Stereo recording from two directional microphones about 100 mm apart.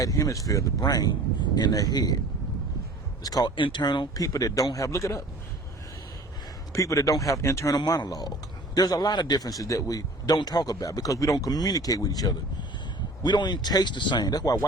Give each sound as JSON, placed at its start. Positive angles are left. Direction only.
{"t": 0.0, "sound": "a man's voice", "side_deg": 35}
{"t": 3.2, "sound": "a man's voice", "side_deg": 40}
{"t": 3.5, "sound": "a man's voice", "side_deg": 55}
{"t": 6.7, "sound": "a man's voice", "side_deg": 35}
{"t": 7.8, "sound": "a man's voice", "side_deg": 45}